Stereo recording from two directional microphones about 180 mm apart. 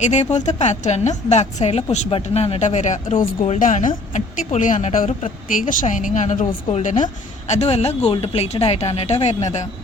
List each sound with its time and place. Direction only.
0.0 s a woman's voice: 40° left (ahead or behind)